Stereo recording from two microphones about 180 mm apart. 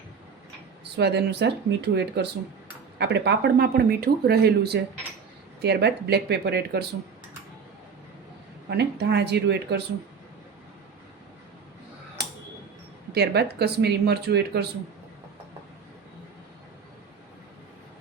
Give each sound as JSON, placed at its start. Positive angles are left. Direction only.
{"t": 0.9, "sound": "speech", "side_deg": -70}
{"t": 8.7, "sound": "speech", "side_deg": -70}
{"t": 13.1, "sound": "speech", "side_deg": -65}